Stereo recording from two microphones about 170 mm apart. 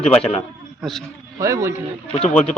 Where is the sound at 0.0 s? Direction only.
5° left (ahead or behind).